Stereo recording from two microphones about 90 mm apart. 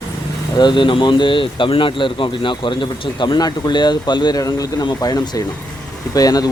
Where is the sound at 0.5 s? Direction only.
60° left (ahead or behind).